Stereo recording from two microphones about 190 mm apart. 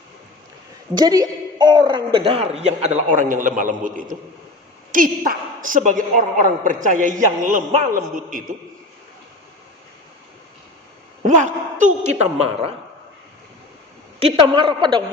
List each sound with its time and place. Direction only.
0.9 s a man's voice: 20° right (ahead or behind); by 8.4 s 45° right (ahead or behind)
11.3 s a woman's voice: 40° right (ahead or behind)
14.2 s a man's voice: 30° right (ahead or behind)